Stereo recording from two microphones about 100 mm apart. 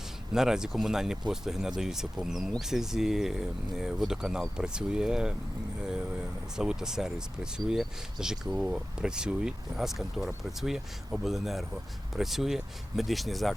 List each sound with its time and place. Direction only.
0.3 s speech: 5° right (ahead or behind)